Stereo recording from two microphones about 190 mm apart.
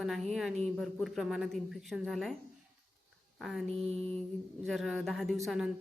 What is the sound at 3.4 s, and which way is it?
Speech, centre (ahead or behind).